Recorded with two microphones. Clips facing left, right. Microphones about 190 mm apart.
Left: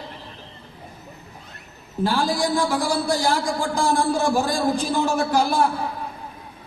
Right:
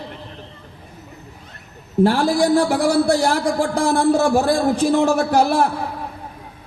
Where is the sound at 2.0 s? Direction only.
70° right (ahead or behind).